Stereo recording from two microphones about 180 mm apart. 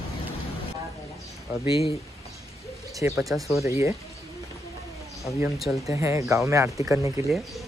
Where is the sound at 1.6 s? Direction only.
30° left (ahead or behind).